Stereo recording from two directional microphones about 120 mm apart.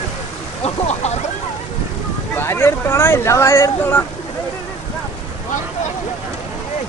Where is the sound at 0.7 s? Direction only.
65° left (ahead or behind).